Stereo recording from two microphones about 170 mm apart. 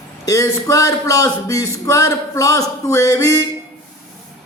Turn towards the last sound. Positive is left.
turn(degrees=15)  # may be behind; listen again after turning